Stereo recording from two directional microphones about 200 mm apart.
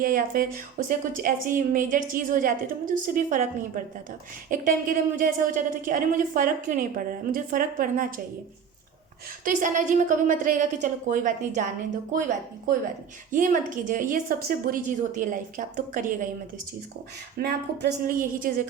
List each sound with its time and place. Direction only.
0.0 s speech: 45° right (ahead or behind)
4.4 s speech: 45° right (ahead or behind)
9.4 s a woman's voice: 40° right (ahead or behind)
13.3 s a woman's voice: 40° right (ahead or behind)
17.4 s speech: 50° right (ahead or behind)